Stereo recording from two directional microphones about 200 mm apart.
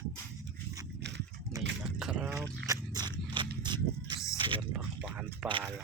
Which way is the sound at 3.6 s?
20° right (ahead or behind).